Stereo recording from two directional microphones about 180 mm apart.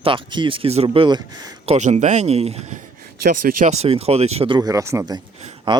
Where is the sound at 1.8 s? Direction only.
40° right (ahead or behind).